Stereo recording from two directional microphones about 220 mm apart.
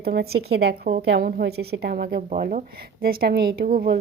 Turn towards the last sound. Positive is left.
turn(degrees=-40)  # may be behind; listen again after turning